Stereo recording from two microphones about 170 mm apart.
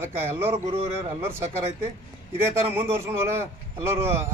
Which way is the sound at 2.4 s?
15° right (ahead or behind).